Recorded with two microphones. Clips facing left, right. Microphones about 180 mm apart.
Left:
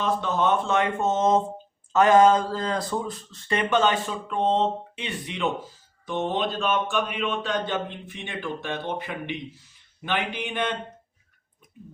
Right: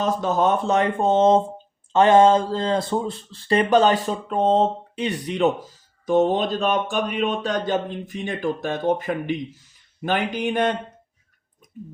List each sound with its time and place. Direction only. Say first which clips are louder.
0.0 s speech: right 4 dB; 40° right (ahead or behind)